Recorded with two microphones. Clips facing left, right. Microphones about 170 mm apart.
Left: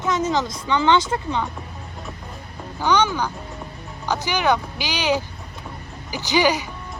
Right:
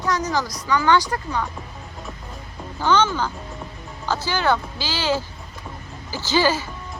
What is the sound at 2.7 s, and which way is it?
Speech, 15° left (ahead or behind).